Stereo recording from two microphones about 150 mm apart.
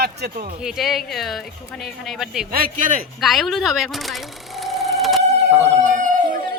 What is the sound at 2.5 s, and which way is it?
Speech, 75° right (ahead or behind).